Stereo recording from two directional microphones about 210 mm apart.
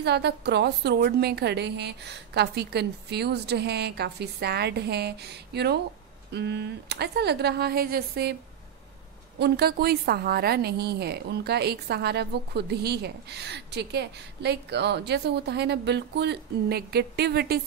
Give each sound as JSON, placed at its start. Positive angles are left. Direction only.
{"t": 0.0, "sound": "a woman's voice", "side_deg": -50}
{"t": 9.4, "sound": "a woman's voice", "side_deg": -50}